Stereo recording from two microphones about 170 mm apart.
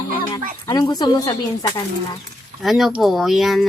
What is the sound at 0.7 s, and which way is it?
Speech, 25° left (ahead or behind).